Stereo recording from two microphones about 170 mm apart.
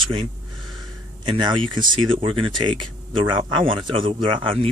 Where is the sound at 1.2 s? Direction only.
30° right (ahead or behind).